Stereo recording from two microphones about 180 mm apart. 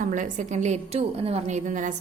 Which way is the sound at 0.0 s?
45° right (ahead or behind).